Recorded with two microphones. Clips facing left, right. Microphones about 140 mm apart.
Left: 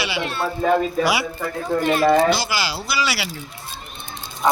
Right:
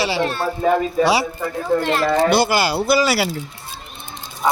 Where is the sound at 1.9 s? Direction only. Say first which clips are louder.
Left 1 dB; 60° right (ahead or behind).